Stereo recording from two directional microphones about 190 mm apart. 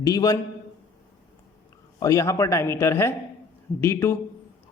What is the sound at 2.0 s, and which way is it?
A man's voice, 15° left (ahead or behind).